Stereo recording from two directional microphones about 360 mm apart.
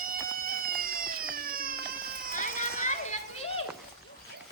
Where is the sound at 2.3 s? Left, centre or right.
Left.